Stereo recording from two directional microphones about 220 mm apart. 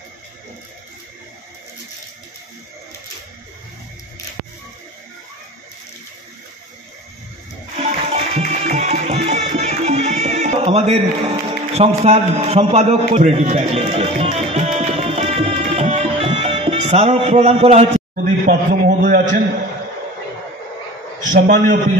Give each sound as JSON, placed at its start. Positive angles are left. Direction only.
{"t": 7.7, "sound": "music", "side_deg": -30}
{"t": 18.4, "sound": "a man's voice", "side_deg": -40}
{"t": 21.2, "sound": "a man's voice", "side_deg": -35}